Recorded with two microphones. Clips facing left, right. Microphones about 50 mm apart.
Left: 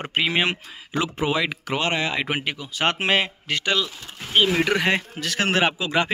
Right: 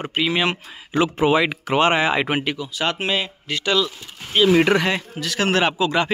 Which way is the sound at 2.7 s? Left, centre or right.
Left.